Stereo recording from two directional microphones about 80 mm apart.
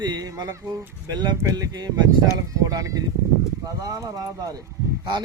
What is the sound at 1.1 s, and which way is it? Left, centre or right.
Speech, right.